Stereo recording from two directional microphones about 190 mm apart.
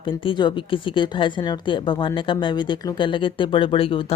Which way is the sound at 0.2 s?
25° left (ahead or behind).